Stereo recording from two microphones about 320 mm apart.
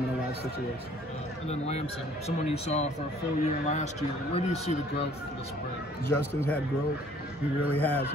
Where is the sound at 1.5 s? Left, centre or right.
Centre.